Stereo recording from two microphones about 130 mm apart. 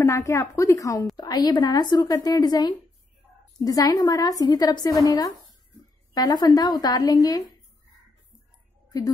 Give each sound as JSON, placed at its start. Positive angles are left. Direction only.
{"t": 0.0, "sound": "a woman's voice", "side_deg": 25}
{"t": 8.9, "sound": "a woman's voice", "side_deg": 25}